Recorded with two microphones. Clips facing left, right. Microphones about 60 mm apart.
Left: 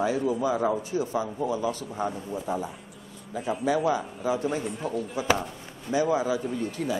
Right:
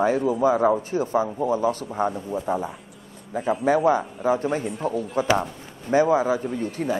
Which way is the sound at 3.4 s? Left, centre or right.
Centre.